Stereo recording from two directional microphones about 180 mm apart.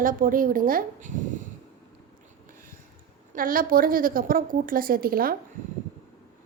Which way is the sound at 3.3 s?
50° right (ahead or behind).